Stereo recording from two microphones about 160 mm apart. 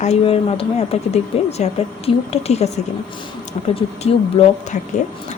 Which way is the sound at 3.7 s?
40° left (ahead or behind).